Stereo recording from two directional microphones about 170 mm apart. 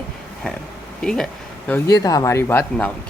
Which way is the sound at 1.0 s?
5° left (ahead or behind).